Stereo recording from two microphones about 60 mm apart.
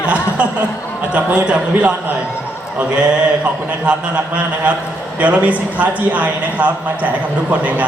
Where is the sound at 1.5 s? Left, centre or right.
Centre.